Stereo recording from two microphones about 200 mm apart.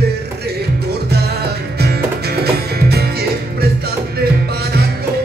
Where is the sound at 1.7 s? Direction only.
55° right (ahead or behind).